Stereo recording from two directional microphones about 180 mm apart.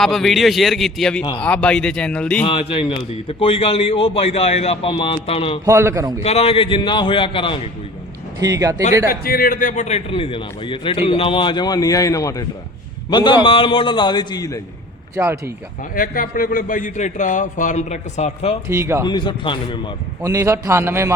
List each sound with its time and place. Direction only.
0.0 s a man's voice: centre (ahead or behind)
2.4 s a man's voice: 30° left (ahead or behind)
5.6 s a man's voice: 15° right (ahead or behind)
6.2 s a man's voice: 35° left (ahead or behind)
8.4 s speech: 20° right (ahead or behind)
9.0 s a man's voice: 55° left (ahead or behind); by 14.6 s 20° left (ahead or behind)
15.1 s speech: 15° right (ahead or behind)
16.0 s a man's voice: 50° left (ahead or behind)
18.7 s a man's voice: 15° right (ahead or behind)
19.0 s a man's voice: 25° left (ahead or behind)
20.2 s a man's voice: 15° right (ahead or behind)